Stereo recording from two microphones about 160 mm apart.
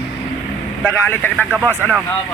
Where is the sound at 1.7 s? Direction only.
10° left (ahead or behind).